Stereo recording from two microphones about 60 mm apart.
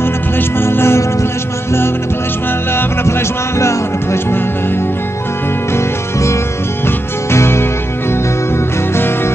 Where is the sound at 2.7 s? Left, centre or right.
Left.